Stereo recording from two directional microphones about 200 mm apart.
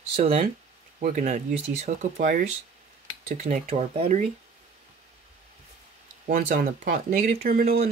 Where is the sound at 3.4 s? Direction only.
35° right (ahead or behind).